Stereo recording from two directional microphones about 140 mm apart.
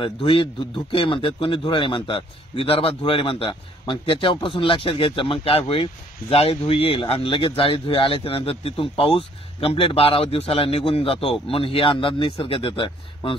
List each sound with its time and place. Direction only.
0.0 s a man's voice: 40° left (ahead or behind)